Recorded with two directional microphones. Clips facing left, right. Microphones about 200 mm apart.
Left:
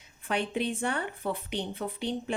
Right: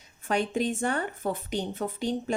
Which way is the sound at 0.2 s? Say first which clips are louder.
Right 3 dB; 45° right (ahead or behind).